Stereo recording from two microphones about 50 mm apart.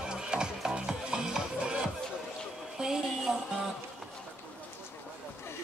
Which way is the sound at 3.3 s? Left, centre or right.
Centre.